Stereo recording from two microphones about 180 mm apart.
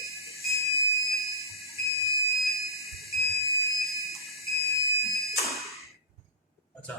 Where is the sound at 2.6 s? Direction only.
Centre (ahead or behind).